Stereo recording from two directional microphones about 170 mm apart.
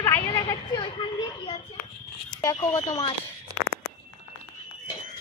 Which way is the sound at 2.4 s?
15° left (ahead or behind).